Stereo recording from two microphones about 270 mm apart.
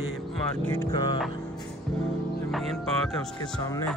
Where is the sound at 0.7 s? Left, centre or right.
Centre.